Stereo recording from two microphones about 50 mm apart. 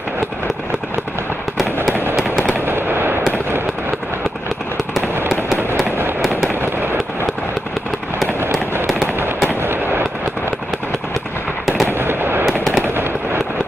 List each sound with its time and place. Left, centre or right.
2.6 s fireworks: right
9.6 s fireworks: right
11.6 s fireworks: centre
11.9 s fireworks: right
12.4 s fireworks: centre
12.8 s fireworks: right